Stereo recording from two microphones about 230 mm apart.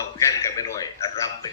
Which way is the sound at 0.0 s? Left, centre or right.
Centre.